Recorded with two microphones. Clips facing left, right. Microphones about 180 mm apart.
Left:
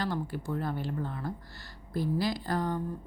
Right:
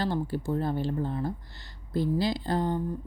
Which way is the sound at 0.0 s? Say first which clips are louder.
Right 4 dB; 30° right (ahead or behind).